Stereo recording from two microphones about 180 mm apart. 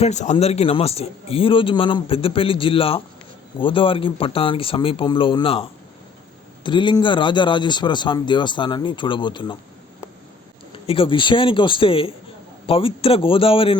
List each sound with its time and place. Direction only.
0.0 s a man's voice: 40° left (ahead or behind)
10.8 s a man's voice: 30° left (ahead or behind)